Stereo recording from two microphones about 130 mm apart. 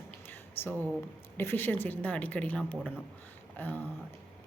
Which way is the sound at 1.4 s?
15° left (ahead or behind).